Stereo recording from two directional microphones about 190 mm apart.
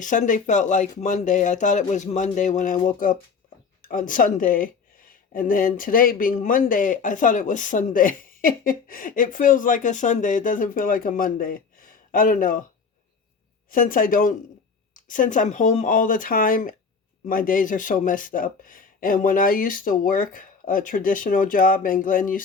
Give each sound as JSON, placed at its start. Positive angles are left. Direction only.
{"t": 0.0, "sound": "speech", "side_deg": 40}
{"t": 13.7, "sound": "speech", "side_deg": 45}